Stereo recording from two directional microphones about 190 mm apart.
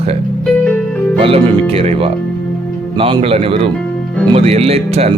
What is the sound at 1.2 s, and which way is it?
Speech, 30° right (ahead or behind).